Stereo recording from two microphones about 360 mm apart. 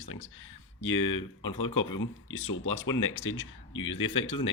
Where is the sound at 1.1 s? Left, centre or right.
Left.